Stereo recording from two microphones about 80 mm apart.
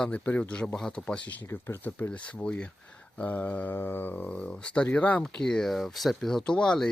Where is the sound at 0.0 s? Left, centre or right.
Centre.